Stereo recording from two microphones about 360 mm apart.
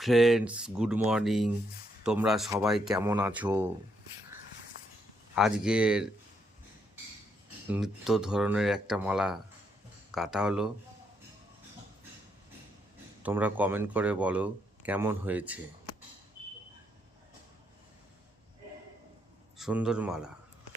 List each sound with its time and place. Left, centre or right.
0.0 s speech: centre
5.3 s speech: centre
7.7 s speech: centre
13.2 s speech: centre
19.5 s speech: centre